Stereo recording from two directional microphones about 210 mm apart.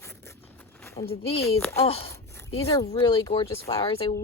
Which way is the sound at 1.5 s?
10° left (ahead or behind).